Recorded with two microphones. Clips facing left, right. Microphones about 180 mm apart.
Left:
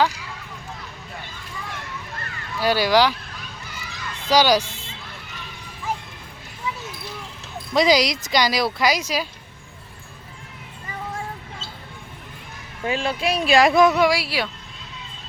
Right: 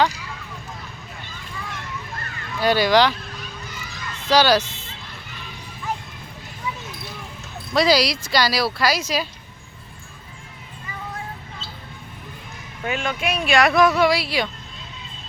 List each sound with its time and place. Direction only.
2.6 s speech: 10° left (ahead or behind)
4.3 s speech: 15° left (ahead or behind)
7.7 s speech: 15° left (ahead or behind)
12.8 s speech: 30° left (ahead or behind); by 14.5 s 5° left (ahead or behind)